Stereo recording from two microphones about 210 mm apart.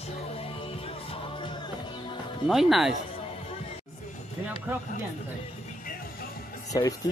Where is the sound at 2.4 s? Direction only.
Centre (ahead or behind).